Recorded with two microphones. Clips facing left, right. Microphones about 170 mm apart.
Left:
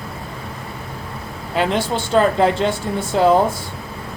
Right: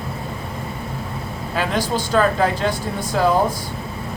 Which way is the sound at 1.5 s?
25° left (ahead or behind).